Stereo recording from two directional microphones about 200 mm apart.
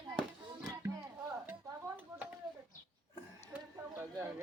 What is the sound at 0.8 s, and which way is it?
Music, 10° right (ahead or behind).